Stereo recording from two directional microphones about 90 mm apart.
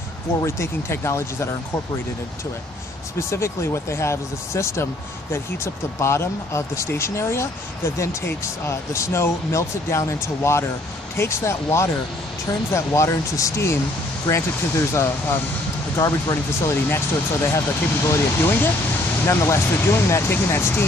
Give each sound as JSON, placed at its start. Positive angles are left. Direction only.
{"t": 0.5, "sound": "speech", "side_deg": 30}
{"t": 3.2, "sound": "speech", "side_deg": 30}